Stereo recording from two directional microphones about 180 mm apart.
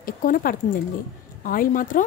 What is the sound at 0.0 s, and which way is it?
Speech, 50° left (ahead or behind).